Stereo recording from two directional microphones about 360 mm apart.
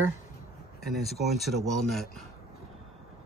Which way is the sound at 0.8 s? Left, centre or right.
Centre.